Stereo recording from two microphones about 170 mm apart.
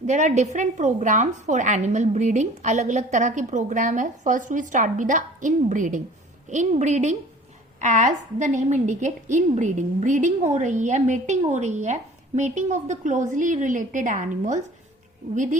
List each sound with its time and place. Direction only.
0.0 s a woman's voice: 45° right (ahead or behind)